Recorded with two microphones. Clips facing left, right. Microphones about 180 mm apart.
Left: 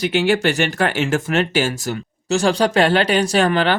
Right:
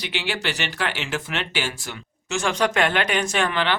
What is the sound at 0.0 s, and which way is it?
Speech, 45° left (ahead or behind).